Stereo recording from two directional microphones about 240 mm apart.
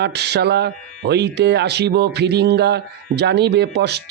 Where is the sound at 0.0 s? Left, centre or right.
Right.